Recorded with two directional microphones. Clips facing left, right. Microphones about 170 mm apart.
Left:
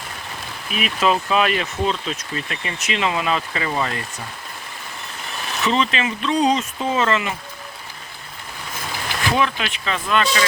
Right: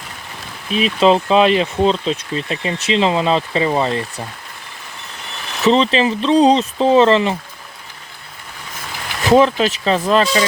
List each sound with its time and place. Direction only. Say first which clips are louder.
0.7 s speech: right 7 dB; 30° right (ahead or behind)
5.6 s speech: right 7 dB; 35° right (ahead or behind)
9.3 s speech: right 11 dB; 35° right (ahead or behind)